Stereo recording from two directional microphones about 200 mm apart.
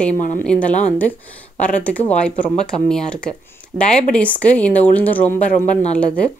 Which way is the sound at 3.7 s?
10° right (ahead or behind).